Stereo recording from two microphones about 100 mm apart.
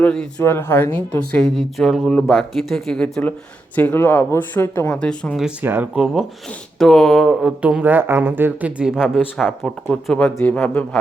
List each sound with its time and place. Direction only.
0.0 s a man's voice: 10° left (ahead or behind)
0.4 s speech: 25° left (ahead or behind)
1.4 s speech: 5° left (ahead or behind); by 4.9 s 25° left (ahead or behind)
4.9 s a man's voice: 10° left (ahead or behind)
5.6 s speech: 20° right (ahead or behind)
6.7 s speech: 5° left (ahead or behind)
7.6 s speech: 10° right (ahead or behind)
8.8 s speech: 5° right (ahead or behind)
9.9 s a man's voice: 10° left (ahead or behind)